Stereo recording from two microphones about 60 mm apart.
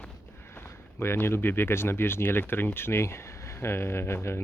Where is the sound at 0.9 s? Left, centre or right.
Left.